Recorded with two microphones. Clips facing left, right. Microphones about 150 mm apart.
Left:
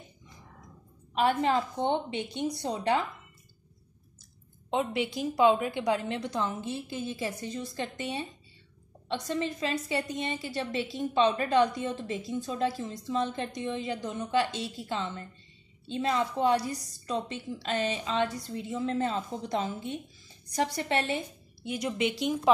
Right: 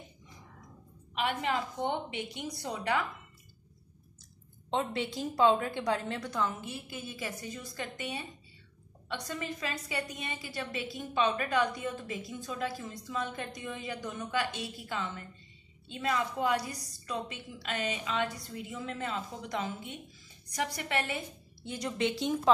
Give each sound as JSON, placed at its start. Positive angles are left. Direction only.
{"t": 1.1, "sound": "a woman's voice", "side_deg": 35}
{"t": 4.6, "sound": "a woman's voice", "side_deg": 15}
{"t": 21.6, "sound": "speech", "side_deg": 15}